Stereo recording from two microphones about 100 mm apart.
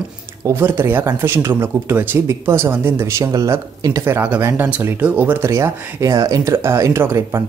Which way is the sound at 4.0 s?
20° right (ahead or behind).